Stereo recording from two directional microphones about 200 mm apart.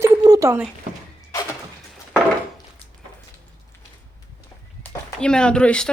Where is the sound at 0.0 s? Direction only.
15° right (ahead or behind).